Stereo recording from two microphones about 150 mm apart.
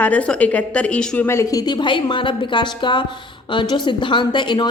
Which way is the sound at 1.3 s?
20° left (ahead or behind).